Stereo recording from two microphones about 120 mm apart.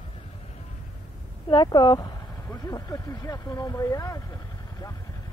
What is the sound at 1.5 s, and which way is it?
Speech, 40° left (ahead or behind).